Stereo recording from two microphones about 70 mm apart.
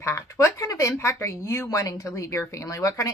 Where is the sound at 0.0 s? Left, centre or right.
Left.